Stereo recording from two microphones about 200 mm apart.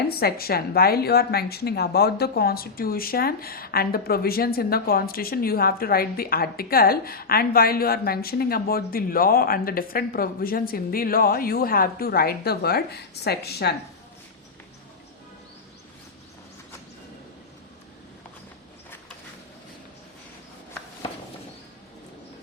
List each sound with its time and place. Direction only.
0.2 s a woman's voice: 50° left (ahead or behind)